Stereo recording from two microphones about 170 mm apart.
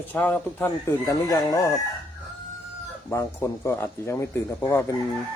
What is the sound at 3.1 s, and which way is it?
Speech, 15° left (ahead or behind).